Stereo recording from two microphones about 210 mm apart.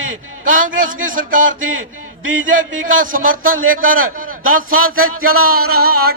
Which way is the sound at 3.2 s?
75° right (ahead or behind).